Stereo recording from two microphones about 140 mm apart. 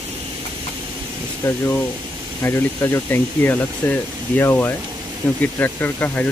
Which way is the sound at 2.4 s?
15° left (ahead or behind).